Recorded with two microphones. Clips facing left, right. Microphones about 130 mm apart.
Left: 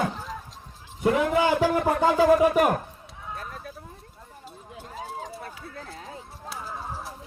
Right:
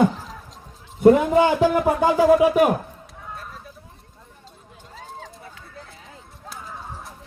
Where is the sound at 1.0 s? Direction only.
45° right (ahead or behind).